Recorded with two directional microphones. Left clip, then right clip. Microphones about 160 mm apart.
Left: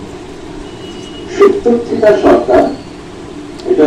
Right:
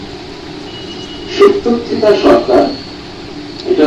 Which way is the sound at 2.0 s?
5° left (ahead or behind).